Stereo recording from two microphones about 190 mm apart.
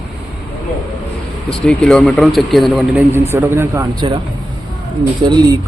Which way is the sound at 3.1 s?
10° right (ahead or behind).